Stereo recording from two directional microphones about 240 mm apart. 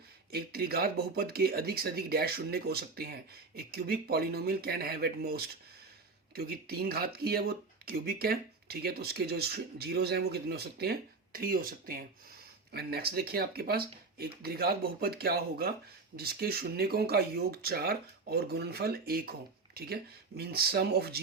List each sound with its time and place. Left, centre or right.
0.3 s speech: right